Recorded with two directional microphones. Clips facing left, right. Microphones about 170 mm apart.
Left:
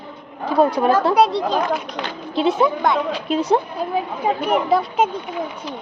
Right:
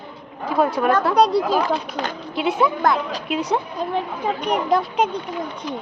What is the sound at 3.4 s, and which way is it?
Speech, 25° left (ahead or behind).